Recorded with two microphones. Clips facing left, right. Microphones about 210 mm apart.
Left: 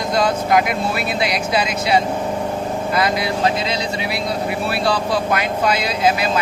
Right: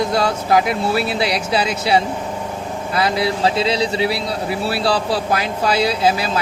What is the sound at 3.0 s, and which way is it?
Speech, 30° right (ahead or behind).